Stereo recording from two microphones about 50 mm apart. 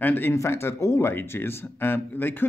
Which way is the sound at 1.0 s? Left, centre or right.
Left.